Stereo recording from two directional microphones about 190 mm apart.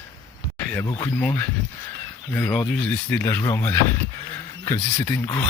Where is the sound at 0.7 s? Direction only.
10° left (ahead or behind).